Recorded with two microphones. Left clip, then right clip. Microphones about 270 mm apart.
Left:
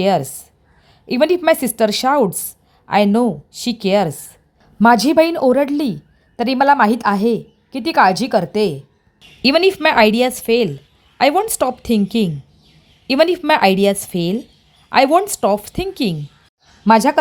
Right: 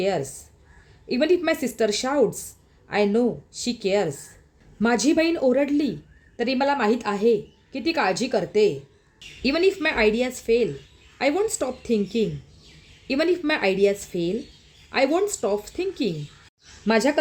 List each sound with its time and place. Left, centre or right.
0.0 s a woman's voice: left